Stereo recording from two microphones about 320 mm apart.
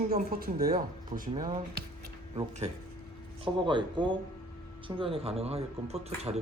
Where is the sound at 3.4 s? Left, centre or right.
Centre.